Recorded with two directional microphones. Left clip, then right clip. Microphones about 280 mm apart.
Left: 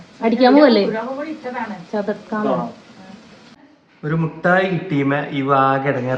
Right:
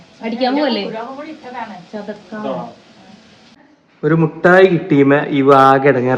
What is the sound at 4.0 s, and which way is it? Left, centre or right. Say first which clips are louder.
A man's voice: right 8 dB; centre.